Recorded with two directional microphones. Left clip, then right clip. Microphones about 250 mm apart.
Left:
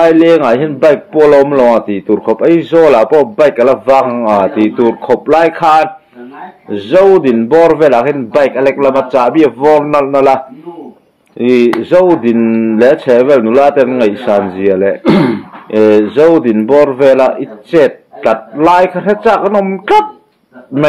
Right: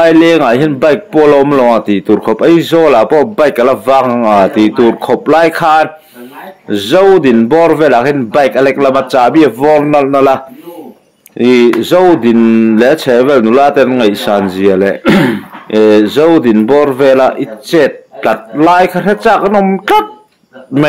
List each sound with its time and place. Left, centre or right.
0.0 s a man's voice: right
15.0 s speech: centre
15.7 s a man's voice: right